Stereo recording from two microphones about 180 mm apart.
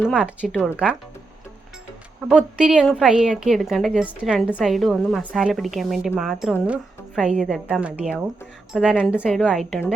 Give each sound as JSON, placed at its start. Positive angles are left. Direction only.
{"t": 0.1, "sound": "a woman's voice", "side_deg": -5}
{"t": 2.3, "sound": "a woman's voice", "side_deg": -5}